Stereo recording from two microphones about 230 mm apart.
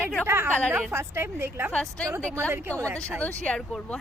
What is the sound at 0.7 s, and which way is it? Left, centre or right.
A woman's voice, centre.